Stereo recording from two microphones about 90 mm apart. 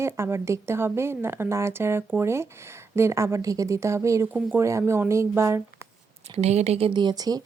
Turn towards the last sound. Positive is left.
turn(degrees=-45)  # may be behind; listen again after turning